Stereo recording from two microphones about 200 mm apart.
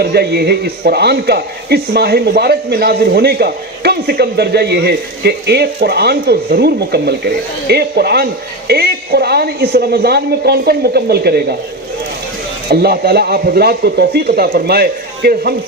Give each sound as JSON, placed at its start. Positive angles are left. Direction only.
{"t": 0.0, "sound": "speech", "side_deg": -50}
{"t": 12.7, "sound": "speech", "side_deg": -50}